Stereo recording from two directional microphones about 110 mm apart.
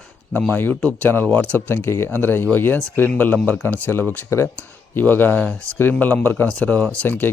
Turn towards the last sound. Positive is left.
turn(degrees=20)  # may be behind; listen again after turning